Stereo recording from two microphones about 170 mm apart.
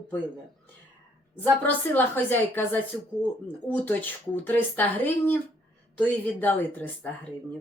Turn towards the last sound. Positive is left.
turn(degrees=10)  # may be behind; listen again after turning